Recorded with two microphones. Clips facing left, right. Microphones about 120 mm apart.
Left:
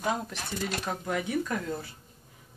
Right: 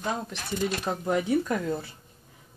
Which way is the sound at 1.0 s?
25° right (ahead or behind).